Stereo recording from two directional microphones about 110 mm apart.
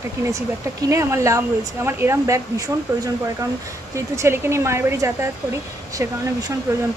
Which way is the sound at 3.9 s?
25° right (ahead or behind).